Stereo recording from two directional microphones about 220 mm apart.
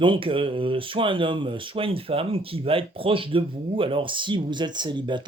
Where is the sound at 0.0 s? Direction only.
25° right (ahead or behind).